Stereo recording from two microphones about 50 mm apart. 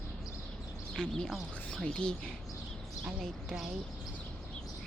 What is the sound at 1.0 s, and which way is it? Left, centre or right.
Speech, centre.